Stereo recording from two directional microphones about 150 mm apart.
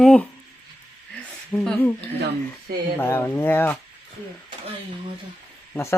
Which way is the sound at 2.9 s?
15° left (ahead or behind).